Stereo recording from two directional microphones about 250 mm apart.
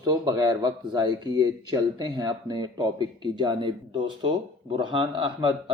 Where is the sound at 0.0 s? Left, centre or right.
Centre.